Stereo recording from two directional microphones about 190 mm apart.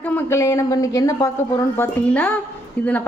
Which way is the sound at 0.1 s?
15° left (ahead or behind).